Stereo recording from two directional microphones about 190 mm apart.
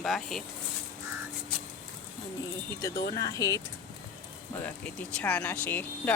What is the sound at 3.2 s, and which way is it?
Speech, 20° left (ahead or behind).